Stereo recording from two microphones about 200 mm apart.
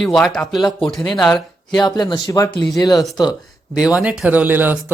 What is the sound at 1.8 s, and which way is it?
Speech, 20° left (ahead or behind).